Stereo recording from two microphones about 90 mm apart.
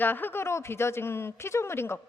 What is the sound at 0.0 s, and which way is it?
A woman's voice, 20° left (ahead or behind).